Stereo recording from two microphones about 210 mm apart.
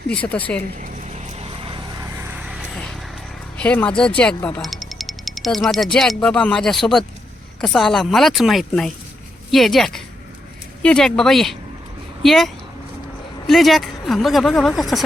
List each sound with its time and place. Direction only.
0.1 s speech: 5° left (ahead or behind)
0.8 s vehicle: 30° right (ahead or behind)
2.4 s vehicle: centre (ahead or behind)
3.6 s speech: 5° left (ahead or behind)
13.5 s speech: centre (ahead or behind)